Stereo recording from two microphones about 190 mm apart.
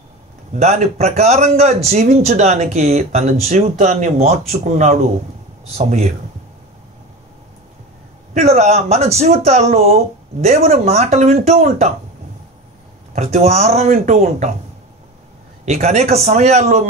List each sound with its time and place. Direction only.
0.5 s speech: 35° right (ahead or behind)
8.4 s speech: 35° right (ahead or behind)
13.1 s speech: 35° right (ahead or behind)
15.6 s speech: 35° right (ahead or behind)